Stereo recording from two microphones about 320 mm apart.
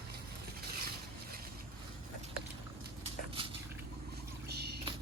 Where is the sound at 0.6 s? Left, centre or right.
Right.